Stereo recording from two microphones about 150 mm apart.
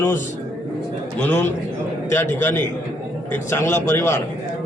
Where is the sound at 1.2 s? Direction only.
15° left (ahead or behind).